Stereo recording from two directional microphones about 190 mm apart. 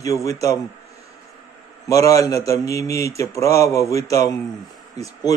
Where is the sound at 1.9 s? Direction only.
15° left (ahead or behind).